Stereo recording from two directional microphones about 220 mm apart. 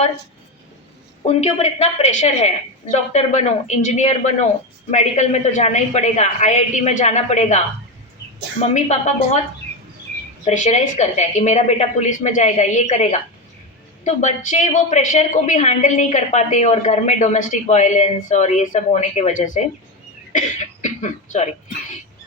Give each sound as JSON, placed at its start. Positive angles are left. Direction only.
{"t": 1.3, "sound": "a woman's voice", "side_deg": 30}
{"t": 8.7, "sound": "a woman's voice", "side_deg": 30}
{"t": 10.4, "sound": "a woman's voice", "side_deg": 35}
{"t": 20.8, "sound": "speech", "side_deg": 35}